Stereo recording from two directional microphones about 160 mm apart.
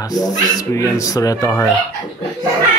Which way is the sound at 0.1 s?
25° left (ahead or behind).